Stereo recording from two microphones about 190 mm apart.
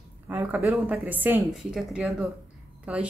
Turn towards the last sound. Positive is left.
turn(degrees=-5)  # may be behind; listen again after turning